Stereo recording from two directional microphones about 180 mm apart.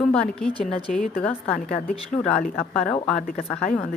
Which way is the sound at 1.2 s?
5° left (ahead or behind).